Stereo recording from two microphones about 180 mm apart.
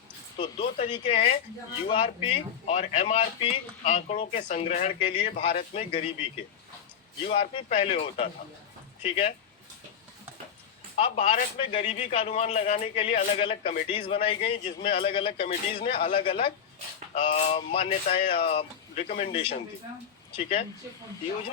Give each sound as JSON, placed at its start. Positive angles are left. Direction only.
{"t": 0.3, "sound": "a man's voice", "side_deg": 30}
{"t": 10.9, "sound": "a man's voice", "side_deg": 35}